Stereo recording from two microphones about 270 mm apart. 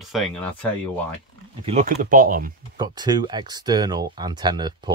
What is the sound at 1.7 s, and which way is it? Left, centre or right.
Speech, right.